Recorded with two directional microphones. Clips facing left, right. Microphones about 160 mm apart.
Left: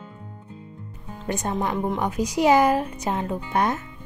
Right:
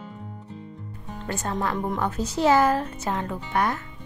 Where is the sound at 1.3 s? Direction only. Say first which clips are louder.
Left 2 dB; 20° left (ahead or behind).